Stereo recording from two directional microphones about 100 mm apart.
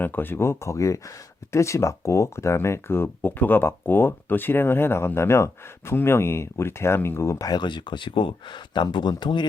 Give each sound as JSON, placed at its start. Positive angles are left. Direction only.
{"t": 0.0, "sound": "speech", "side_deg": 20}
{"t": 7.5, "sound": "speech", "side_deg": 50}